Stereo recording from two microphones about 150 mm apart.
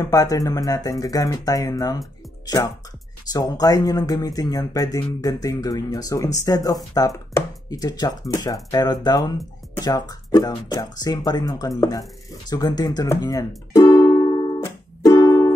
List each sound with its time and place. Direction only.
0.0 s speech: 20° left (ahead or behind)
13.7 s music: 25° left (ahead or behind)